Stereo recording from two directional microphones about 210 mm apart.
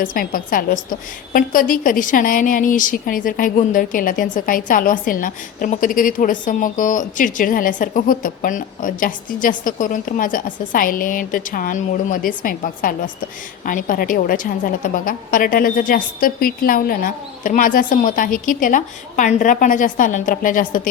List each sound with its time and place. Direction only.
0.0 s a woman's voice: 40° left (ahead or behind)